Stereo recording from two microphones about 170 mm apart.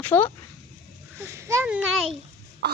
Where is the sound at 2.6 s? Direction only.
75° right (ahead or behind).